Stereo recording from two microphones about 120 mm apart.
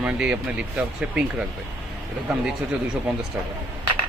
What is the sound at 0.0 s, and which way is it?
Speech, 10° right (ahead or behind).